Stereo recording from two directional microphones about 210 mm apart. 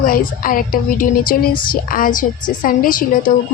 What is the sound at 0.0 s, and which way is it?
A woman's voice, 40° left (ahead or behind).